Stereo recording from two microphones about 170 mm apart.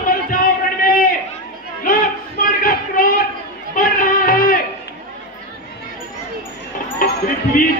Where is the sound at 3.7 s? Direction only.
55° left (ahead or behind).